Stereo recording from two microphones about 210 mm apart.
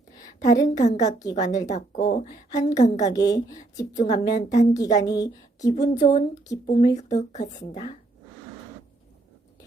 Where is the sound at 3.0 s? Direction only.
15° left (ahead or behind).